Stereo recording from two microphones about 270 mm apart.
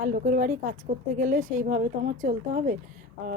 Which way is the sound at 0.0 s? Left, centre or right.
Right.